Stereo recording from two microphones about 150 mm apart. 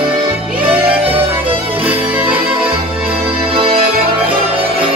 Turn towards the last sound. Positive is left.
turn(degrees=-40)  # may be behind; listen again after turning